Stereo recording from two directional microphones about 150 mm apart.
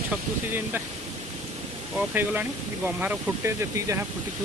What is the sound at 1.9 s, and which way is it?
Speech, 10° right (ahead or behind).